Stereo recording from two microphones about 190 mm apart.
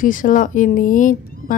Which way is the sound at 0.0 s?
45° left (ahead or behind).